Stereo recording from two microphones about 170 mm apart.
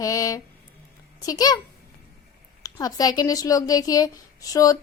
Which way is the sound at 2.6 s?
20° left (ahead or behind).